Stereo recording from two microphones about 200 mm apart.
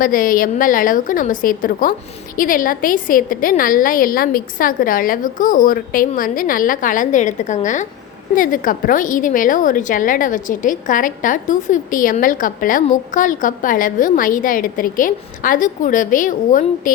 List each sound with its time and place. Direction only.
0.0 s a woman's voice: 45° left (ahead or behind)